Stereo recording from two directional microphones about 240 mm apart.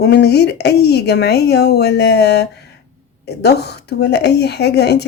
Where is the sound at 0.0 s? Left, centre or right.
Left.